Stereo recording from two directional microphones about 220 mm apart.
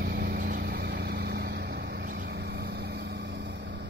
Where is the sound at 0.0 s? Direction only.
40° right (ahead or behind).